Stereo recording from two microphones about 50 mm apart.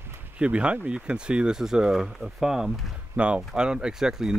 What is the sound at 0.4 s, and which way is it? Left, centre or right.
Speech, right.